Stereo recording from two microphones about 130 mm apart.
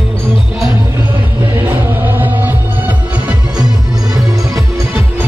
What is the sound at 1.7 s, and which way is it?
Music, 15° right (ahead or behind).